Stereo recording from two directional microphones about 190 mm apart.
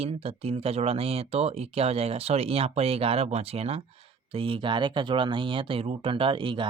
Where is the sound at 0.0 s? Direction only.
30° right (ahead or behind).